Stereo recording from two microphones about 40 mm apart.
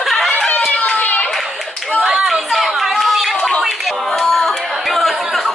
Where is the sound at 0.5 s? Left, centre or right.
Left.